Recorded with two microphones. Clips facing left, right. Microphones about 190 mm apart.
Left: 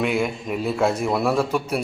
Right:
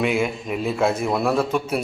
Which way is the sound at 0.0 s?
5° right (ahead or behind).